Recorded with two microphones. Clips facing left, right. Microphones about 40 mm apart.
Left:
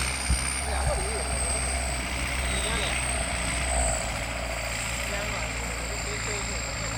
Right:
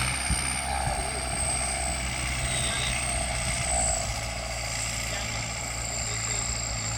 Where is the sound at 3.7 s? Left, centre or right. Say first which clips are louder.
Even; left.